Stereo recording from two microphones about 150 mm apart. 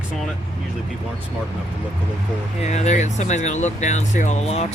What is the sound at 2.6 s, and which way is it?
Speech, 50° left (ahead or behind).